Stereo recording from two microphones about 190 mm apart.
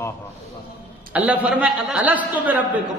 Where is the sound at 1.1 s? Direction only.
5° right (ahead or behind).